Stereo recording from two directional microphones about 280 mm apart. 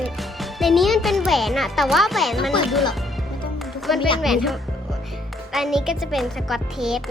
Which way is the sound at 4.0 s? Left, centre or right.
Centre.